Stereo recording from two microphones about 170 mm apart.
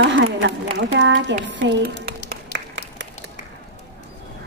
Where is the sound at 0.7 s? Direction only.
90° right.